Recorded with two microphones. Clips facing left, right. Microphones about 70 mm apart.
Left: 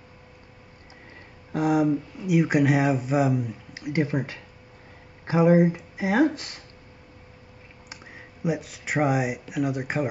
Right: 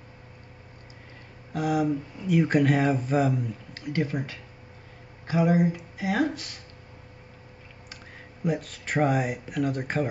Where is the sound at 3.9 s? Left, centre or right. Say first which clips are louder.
Left 3 dB; left.